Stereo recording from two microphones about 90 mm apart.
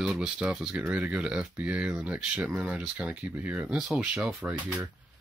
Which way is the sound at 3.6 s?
5° right (ahead or behind).